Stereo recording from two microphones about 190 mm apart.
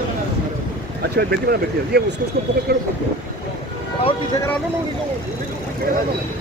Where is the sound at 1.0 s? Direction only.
55° right (ahead or behind).